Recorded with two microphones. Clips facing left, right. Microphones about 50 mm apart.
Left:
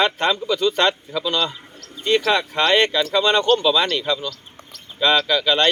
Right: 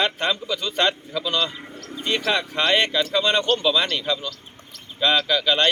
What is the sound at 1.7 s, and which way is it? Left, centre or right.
Bird, right.